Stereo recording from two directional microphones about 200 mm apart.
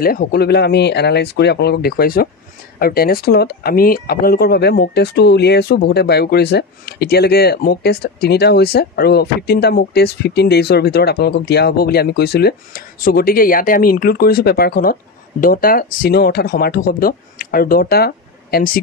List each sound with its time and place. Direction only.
0.0 s speech: 45° left (ahead or behind)